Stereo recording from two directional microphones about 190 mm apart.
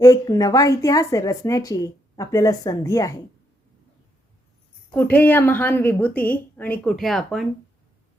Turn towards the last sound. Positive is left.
turn(degrees=0)  # may be behind; listen again after turning